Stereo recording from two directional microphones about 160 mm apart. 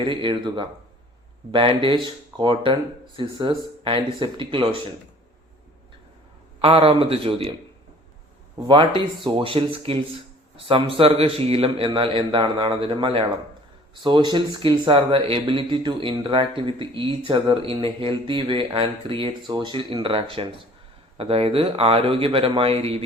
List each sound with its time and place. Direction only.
0.0 s speech: 30° right (ahead or behind)
6.6 s speech: 35° right (ahead or behind)
8.6 s speech: 30° right (ahead or behind)